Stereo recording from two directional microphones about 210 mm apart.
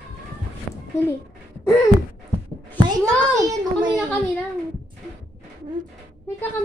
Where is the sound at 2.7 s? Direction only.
20° right (ahead or behind).